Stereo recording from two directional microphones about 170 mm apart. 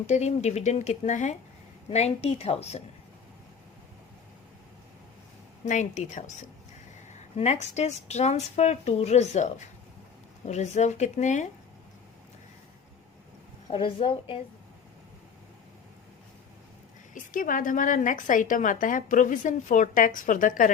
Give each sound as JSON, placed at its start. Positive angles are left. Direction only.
{"t": 0.1, "sound": "a woman's voice", "side_deg": 40}
{"t": 5.6, "sound": "a woman's voice", "side_deg": 45}
{"t": 13.7, "sound": "a woman's voice", "side_deg": 30}
{"t": 17.2, "sound": "a woman's voice", "side_deg": 50}